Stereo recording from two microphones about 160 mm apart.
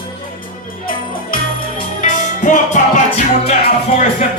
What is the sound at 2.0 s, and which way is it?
Music, 50° left (ahead or behind).